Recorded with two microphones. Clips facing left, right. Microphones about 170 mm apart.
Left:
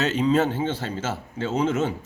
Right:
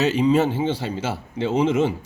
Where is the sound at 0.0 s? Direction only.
10° right (ahead or behind).